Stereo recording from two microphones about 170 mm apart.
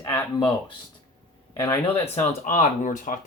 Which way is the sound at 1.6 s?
10° left (ahead or behind).